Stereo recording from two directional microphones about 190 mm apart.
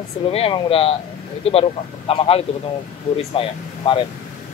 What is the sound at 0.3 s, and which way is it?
Speech, 30° left (ahead or behind).